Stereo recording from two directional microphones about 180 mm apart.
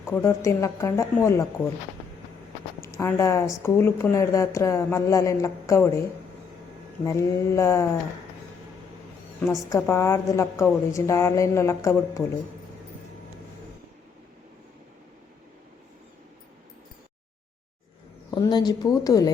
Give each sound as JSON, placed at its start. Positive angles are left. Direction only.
{"t": 0.1, "sound": "a woman's voice", "side_deg": 15}
{"t": 2.8, "sound": "a woman's voice", "side_deg": 15}
{"t": 7.0, "sound": "a woman's voice", "side_deg": 15}
{"t": 9.6, "sound": "a woman's voice", "side_deg": 15}
{"t": 18.3, "sound": "a woman's voice", "side_deg": 20}